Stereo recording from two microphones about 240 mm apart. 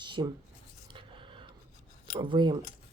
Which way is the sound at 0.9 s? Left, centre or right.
Right.